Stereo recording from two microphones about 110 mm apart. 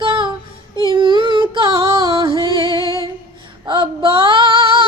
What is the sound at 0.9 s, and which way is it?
Music, 50° right (ahead or behind).